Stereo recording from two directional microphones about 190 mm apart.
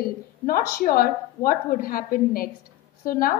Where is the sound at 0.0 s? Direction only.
50° left (ahead or behind).